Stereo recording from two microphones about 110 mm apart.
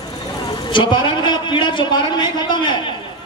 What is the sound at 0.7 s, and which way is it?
A man's voice, 45° left (ahead or behind).